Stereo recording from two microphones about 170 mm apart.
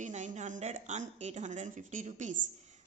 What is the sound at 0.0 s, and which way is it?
A woman's voice, 45° right (ahead or behind).